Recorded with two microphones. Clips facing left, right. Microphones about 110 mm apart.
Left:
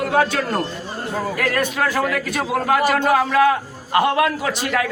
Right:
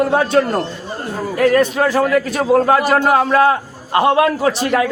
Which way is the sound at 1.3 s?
30° right (ahead or behind).